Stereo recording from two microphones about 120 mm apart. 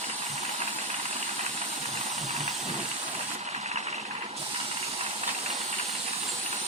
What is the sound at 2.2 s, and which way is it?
Hiss, 70° right (ahead or behind).